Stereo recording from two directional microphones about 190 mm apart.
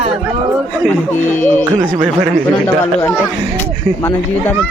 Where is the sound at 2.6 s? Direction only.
15° left (ahead or behind).